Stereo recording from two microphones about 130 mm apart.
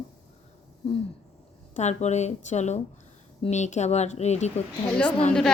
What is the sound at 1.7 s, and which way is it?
Speech, 60° left (ahead or behind).